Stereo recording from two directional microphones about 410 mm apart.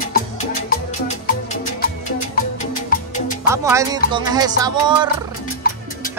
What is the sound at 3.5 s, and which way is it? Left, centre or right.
Music, centre.